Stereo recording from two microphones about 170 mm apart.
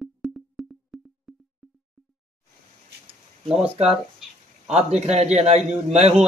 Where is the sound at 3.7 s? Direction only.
5° right (ahead or behind).